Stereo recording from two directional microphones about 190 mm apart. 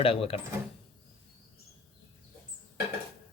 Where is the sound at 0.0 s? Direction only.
30° left (ahead or behind).